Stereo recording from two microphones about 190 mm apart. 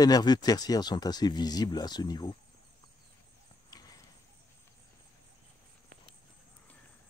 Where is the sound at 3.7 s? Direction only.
20° left (ahead or behind).